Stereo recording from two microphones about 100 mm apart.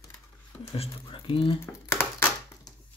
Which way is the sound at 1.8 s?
25° left (ahead or behind).